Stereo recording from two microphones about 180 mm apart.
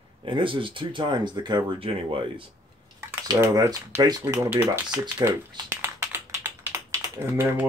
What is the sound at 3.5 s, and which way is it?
Speech, 20° right (ahead or behind).